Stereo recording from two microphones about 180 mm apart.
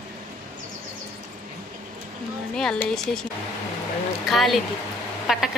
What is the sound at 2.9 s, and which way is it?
Speech, centre (ahead or behind).